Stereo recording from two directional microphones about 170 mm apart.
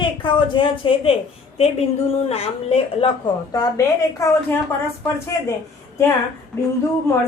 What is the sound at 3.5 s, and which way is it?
A woman's voice, 20° left (ahead or behind).